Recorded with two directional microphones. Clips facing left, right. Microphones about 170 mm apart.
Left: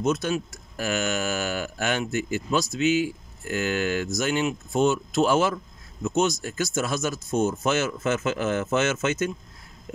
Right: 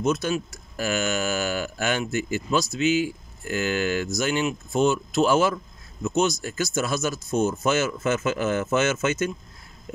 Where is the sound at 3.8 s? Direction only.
55° left (ahead or behind).